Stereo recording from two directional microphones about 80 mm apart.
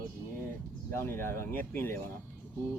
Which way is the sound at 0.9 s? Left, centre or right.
Left.